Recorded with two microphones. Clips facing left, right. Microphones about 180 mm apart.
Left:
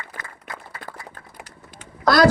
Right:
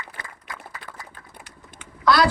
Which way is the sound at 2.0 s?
40° left (ahead or behind).